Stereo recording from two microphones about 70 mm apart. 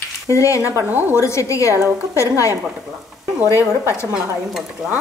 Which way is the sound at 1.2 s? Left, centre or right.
Left.